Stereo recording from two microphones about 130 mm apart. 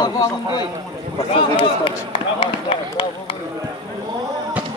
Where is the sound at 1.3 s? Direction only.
45° left (ahead or behind).